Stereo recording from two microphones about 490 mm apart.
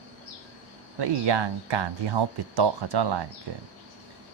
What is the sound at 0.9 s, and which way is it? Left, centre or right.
Speech, right.